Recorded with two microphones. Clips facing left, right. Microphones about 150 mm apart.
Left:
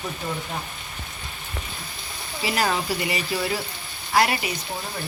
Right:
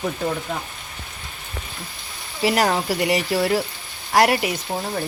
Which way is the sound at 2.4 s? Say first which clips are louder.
Right 5 dB; 65° right (ahead or behind).